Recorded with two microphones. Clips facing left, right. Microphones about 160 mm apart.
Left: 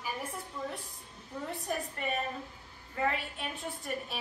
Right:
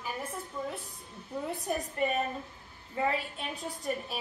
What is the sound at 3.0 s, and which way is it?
Speech, 20° right (ahead or behind).